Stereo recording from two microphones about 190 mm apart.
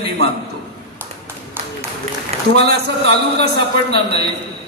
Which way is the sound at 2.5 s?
60° right (ahead or behind).